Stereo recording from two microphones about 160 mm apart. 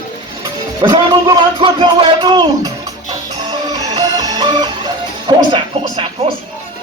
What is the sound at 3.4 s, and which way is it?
Music, 25° right (ahead or behind).